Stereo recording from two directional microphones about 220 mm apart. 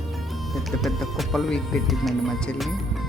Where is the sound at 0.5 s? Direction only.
Centre (ahead or behind).